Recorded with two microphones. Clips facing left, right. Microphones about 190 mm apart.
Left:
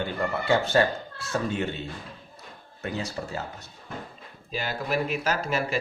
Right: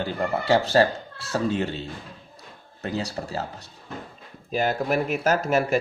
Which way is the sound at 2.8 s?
35° right (ahead or behind).